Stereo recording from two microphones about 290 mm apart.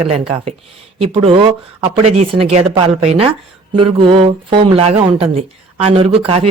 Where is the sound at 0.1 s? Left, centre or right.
Centre.